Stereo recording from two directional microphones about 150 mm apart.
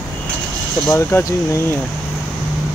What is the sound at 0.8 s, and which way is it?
Speech, 15° left (ahead or behind).